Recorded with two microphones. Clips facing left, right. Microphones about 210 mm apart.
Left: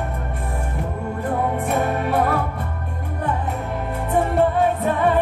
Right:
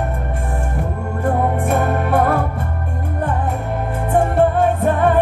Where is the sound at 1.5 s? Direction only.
50° right (ahead or behind).